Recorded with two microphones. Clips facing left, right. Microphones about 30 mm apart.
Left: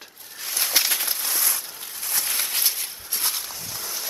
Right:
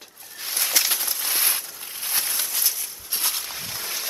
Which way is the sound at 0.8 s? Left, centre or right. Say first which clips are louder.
Left 1 dB; left.